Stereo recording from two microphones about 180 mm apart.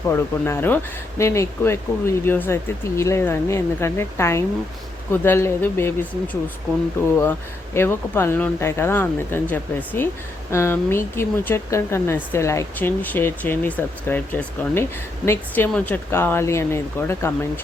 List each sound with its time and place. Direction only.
0.1 s speech: 15° left (ahead or behind)